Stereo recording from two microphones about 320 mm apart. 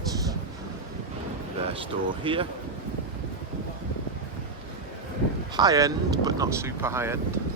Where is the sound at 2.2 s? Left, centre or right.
Centre.